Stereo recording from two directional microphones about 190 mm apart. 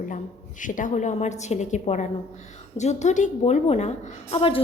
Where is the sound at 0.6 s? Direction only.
45° left (ahead or behind).